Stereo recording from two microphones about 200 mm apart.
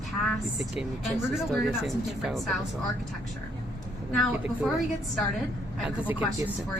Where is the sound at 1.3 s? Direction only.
Centre (ahead or behind).